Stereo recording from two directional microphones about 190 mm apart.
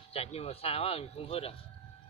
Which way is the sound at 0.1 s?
30° left (ahead or behind).